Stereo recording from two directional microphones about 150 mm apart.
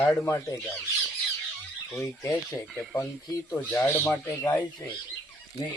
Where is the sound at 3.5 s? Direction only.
15° left (ahead or behind).